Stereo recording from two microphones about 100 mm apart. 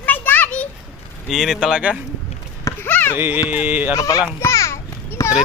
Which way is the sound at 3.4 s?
15° right (ahead or behind).